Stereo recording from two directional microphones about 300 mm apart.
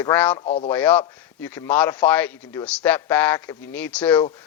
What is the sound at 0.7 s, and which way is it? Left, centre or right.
Speech, centre.